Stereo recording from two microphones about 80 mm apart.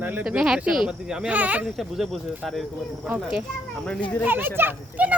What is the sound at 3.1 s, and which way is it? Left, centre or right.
Speech, centre.